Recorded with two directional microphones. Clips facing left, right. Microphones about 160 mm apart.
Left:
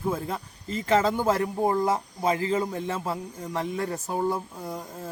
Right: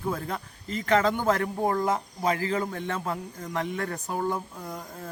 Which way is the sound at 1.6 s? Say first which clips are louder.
Left 1 dB; 15° left (ahead or behind).